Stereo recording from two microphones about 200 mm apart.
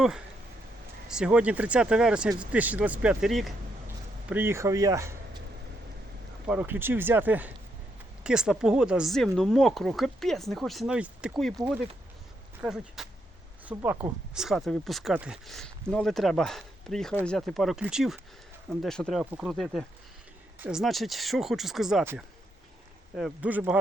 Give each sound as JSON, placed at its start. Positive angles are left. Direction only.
{"t": 1.0, "sound": "speech", "side_deg": -5}
{"t": 6.5, "sound": "speech", "side_deg": -10}